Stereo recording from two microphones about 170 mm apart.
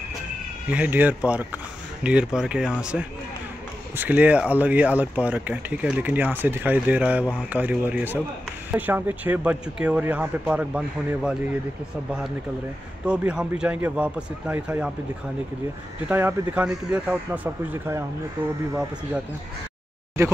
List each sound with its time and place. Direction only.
0.7 s speech: 10° right (ahead or behind)
13.0 s speech: 5° right (ahead or behind)
16.1 s speech: 10° right (ahead or behind)
20.2 s speech: 15° right (ahead or behind)